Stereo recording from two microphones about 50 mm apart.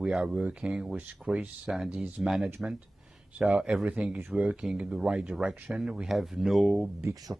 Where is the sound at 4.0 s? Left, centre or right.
Right; by 6.9 s centre.